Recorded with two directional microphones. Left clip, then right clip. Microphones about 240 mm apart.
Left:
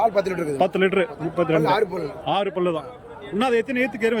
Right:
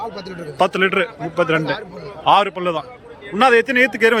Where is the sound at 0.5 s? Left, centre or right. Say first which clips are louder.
Right 5 dB; centre.